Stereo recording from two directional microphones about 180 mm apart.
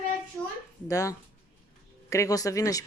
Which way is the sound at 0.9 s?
20° left (ahead or behind).